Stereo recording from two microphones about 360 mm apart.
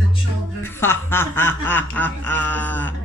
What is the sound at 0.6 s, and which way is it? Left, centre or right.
Speech, centre.